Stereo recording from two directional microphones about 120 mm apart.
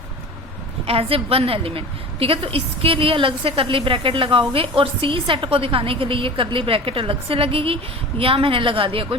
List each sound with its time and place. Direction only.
0.9 s a woman's voice: 55° right (ahead or behind)